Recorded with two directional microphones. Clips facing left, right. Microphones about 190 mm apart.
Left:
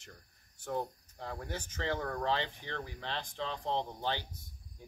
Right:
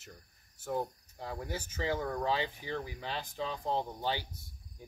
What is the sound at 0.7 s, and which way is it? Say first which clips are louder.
Speech: right 1 dB; 5° right (ahead or behind).